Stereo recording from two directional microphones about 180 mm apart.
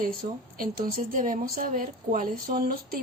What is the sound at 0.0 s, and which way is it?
Speech, 50° right (ahead or behind).